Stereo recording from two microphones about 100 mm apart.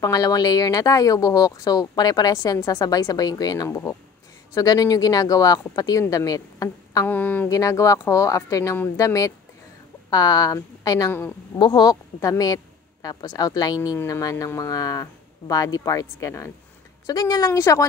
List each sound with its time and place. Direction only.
0.0 s speech: 35° left (ahead or behind)
7.1 s speech: 20° left (ahead or behind)
7.4 s a woman's voice: 35° left (ahead or behind)
11.1 s a woman's voice: 20° left (ahead or behind)
11.5 s speech: 50° left (ahead or behind)
11.9 s speech: 35° left (ahead or behind)